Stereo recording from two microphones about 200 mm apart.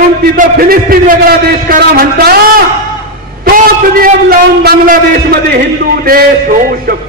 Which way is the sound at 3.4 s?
45° right (ahead or behind).